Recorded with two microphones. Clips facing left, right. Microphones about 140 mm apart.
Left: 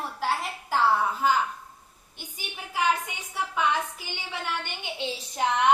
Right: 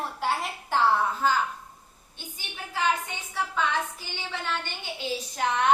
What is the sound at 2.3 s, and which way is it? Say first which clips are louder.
A woman's voice: left 2 dB; 15° left (ahead or behind).